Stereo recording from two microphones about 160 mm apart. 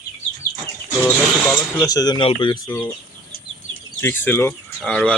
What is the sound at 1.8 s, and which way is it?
Speech, 25° left (ahead or behind).